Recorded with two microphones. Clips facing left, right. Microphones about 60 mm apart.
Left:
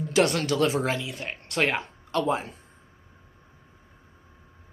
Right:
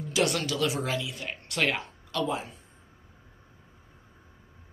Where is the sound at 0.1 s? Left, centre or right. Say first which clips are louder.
Left 4 dB; left.